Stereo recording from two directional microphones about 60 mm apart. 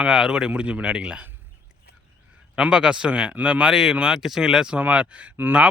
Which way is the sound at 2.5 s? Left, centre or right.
Centre.